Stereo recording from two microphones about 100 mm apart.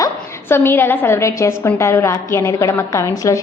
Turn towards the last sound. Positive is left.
turn(degrees=30)  # may be behind; listen again after turning